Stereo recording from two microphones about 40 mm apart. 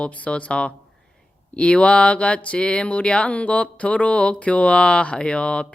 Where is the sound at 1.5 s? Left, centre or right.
Left.